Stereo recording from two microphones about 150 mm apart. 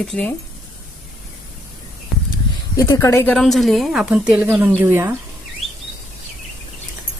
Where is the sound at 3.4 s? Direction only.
Centre (ahead or behind); by 5.1 s 15° right (ahead or behind).